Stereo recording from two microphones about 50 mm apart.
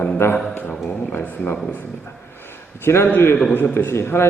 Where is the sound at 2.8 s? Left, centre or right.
Left.